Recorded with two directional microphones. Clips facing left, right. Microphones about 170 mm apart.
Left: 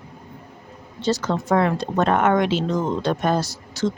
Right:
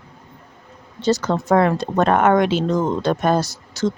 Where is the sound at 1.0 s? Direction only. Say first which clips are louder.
Right 3 dB; 45° right (ahead or behind).